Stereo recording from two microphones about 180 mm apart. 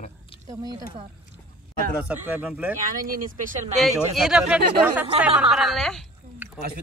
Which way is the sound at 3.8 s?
Centre (ahead or behind).